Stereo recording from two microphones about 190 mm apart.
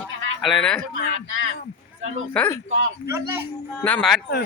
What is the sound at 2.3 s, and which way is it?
Speech, 10° left (ahead or behind).